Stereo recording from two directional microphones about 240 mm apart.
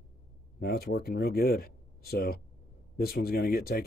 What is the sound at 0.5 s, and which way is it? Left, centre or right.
Speech, left.